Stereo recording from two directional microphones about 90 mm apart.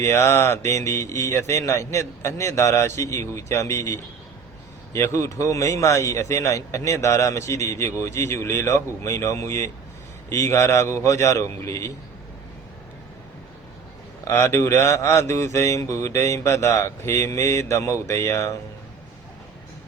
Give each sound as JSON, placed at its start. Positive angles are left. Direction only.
{"t": 0.0, "sound": "a man's voice", "side_deg": 30}
{"t": 14.3, "sound": "a man's voice", "side_deg": 30}